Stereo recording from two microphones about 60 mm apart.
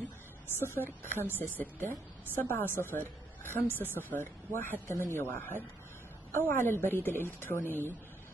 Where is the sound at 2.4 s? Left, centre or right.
Left.